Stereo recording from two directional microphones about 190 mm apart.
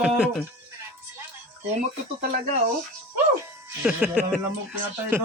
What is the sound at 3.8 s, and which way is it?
Speech, 5° right (ahead or behind).